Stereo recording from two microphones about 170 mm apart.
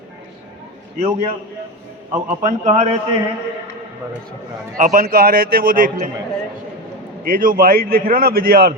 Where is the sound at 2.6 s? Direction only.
45° right (ahead or behind).